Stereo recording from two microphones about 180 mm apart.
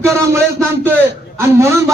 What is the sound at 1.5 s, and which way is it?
Speech, 15° right (ahead or behind).